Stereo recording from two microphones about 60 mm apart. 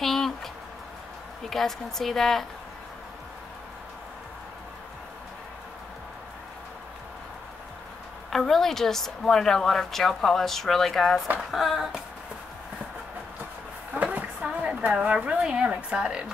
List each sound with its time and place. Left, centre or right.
0.0 s a sound: centre
1.5 s a woman's voice: centre
8.3 s a woman's voice: centre
14.1 s a woman's voice: right